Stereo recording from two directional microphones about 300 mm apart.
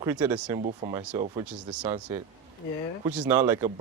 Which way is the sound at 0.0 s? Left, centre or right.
Centre.